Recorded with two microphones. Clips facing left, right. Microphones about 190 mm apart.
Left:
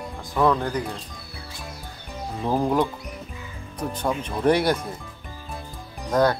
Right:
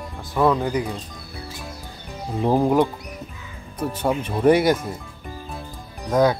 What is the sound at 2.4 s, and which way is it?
Speech, 20° right (ahead or behind).